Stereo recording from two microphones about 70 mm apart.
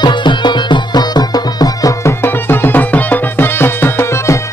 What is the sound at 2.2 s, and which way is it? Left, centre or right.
Music, left.